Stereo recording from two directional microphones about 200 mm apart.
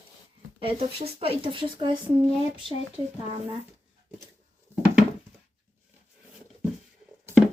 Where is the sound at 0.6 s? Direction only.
25° right (ahead or behind).